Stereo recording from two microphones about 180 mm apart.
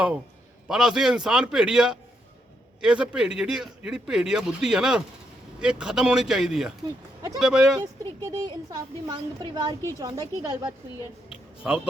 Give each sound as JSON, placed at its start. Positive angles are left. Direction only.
{"t": 0.7, "sound": "a man's voice", "side_deg": 0}
{"t": 8.3, "sound": "speech", "side_deg": -20}
{"t": 11.6, "sound": "a man's voice", "side_deg": -5}